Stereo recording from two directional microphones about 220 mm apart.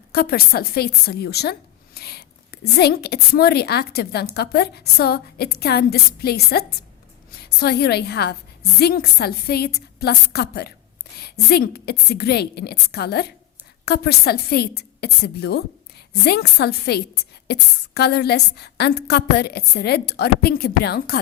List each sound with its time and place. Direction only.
0.1 s a woman's voice: 45° left (ahead or behind)